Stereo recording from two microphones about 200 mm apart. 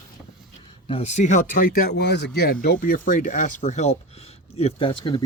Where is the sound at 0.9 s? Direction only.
35° left (ahead or behind); by 2.3 s 55° left (ahead or behind).